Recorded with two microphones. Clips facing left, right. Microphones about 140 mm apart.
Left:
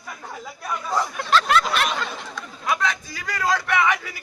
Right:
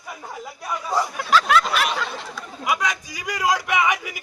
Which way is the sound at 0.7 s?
10° right (ahead or behind).